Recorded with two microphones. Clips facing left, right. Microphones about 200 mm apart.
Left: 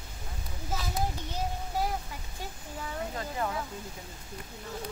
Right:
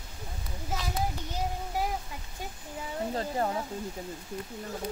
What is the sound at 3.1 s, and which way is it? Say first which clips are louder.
Speech: right 5 dB; 35° right (ahead or behind).